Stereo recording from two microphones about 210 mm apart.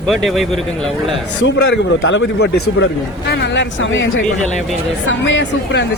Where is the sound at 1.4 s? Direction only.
65° left (ahead or behind).